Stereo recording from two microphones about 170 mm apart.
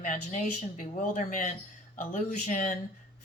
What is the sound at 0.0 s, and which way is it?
Speech, 45° left (ahead or behind).